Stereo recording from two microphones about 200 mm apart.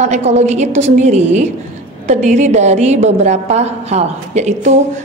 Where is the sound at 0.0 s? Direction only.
35° right (ahead or behind).